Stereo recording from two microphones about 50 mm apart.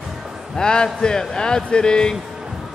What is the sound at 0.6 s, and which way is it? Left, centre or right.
A man's voice, centre.